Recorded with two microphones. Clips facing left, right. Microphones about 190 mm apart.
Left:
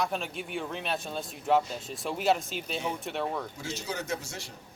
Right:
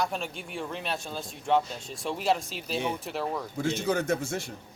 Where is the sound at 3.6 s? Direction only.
55° right (ahead or behind).